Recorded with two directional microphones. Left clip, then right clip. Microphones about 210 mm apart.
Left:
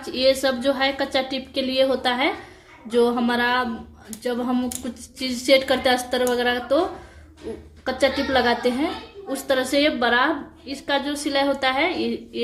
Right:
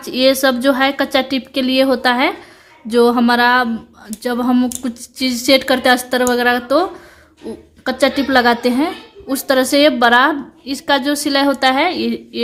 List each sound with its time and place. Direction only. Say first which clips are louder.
0.0 s a woman's voice: right 6 dB; 55° right (ahead or behind)
7.9 s a woman's voice: right 6 dB; 55° right (ahead or behind)